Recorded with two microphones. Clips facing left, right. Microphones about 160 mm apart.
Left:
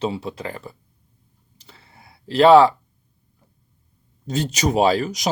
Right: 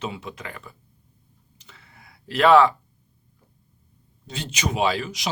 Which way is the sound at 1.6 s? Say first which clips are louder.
Left 3 dB; 35° left (ahead or behind).